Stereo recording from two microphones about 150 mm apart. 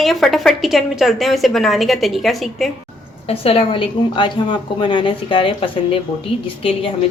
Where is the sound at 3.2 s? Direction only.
40° left (ahead or behind).